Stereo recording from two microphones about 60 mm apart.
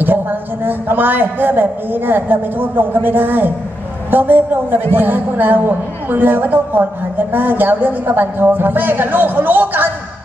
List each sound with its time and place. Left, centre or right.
0.0 s a woman's voice: right